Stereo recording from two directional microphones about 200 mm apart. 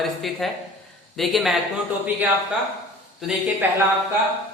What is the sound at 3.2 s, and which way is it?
Speech, 10° right (ahead or behind).